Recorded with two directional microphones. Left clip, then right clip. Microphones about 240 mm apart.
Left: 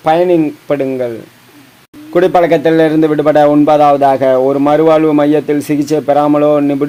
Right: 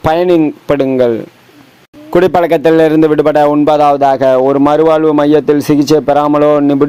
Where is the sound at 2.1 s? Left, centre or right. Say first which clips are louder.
Even; right.